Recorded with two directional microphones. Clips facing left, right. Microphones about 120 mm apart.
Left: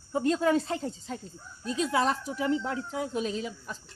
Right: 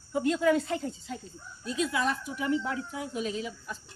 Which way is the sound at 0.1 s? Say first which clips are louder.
Even; 35° left (ahead or behind).